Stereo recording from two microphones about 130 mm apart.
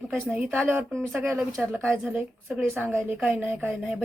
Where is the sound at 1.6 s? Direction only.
5° left (ahead or behind).